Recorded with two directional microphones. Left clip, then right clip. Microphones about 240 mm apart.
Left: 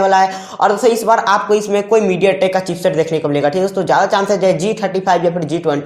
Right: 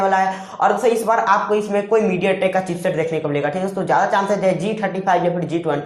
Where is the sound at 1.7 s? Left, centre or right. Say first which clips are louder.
Left 3 dB; left.